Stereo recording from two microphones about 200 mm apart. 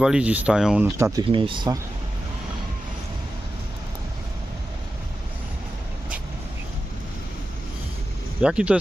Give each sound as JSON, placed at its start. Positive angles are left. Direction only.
{"t": 0.0, "sound": "speech", "side_deg": -5}
{"t": 0.9, "sound": "speech", "side_deg": -15}
{"t": 1.3, "sound": "speech", "side_deg": -25}
{"t": 8.4, "sound": "speech", "side_deg": -5}